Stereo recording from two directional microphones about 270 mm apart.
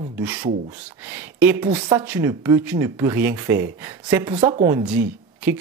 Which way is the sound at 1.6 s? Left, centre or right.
Centre.